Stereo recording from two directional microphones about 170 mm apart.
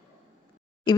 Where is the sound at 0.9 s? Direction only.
25° left (ahead or behind).